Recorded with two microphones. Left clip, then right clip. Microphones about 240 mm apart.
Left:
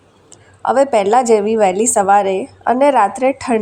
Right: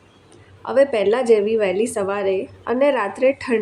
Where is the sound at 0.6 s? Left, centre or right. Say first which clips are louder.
Left 4 dB; left.